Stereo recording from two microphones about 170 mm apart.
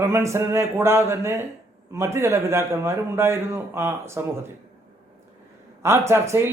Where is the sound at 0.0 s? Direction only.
15° right (ahead or behind).